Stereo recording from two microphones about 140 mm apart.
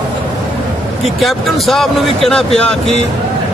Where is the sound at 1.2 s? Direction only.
Centre (ahead or behind).